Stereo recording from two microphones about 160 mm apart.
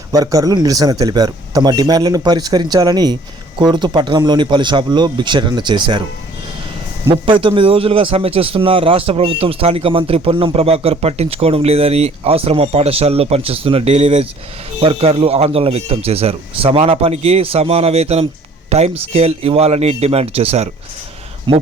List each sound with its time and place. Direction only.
0.1 s speech: 20° right (ahead or behind)
7.1 s speech: 35° right (ahead or behind)
21.5 s speech: 30° right (ahead or behind)